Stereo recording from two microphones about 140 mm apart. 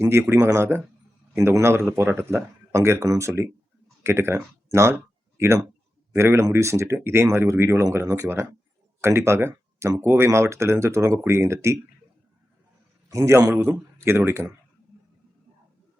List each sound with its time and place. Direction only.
0.0 s speech: 20° right (ahead or behind)
13.1 s a man's voice: 20° right (ahead or behind)